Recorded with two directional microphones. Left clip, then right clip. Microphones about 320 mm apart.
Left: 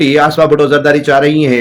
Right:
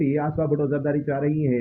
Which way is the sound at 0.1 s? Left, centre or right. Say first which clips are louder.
Left 16 dB; centre.